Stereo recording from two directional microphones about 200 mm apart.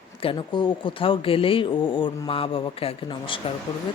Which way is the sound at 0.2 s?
25° left (ahead or behind).